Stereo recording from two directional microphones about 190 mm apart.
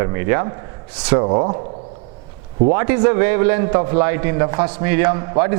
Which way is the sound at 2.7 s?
15° right (ahead or behind).